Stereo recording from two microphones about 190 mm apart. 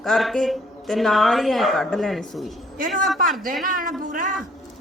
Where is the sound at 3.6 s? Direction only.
45° right (ahead or behind).